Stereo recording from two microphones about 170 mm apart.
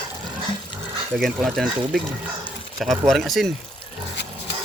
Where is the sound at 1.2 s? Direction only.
Centre (ahead or behind).